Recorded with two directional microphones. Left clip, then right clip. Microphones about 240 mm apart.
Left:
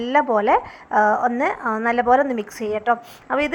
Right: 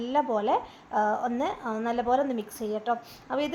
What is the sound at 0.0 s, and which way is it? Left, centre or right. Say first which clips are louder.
A woman's voice: left 8 dB; centre.